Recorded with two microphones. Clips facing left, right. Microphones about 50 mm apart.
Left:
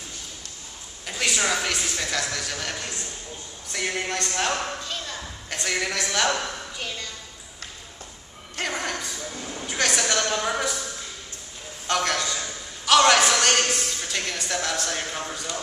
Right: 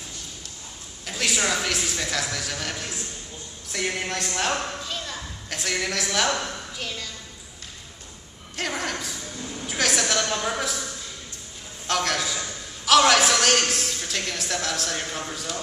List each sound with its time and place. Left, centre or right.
1.0 s a man's voice: centre
4.3 s a sound: centre
8.5 s music: centre
9.7 s a woman's voice: centre
11.9 s a man's voice: centre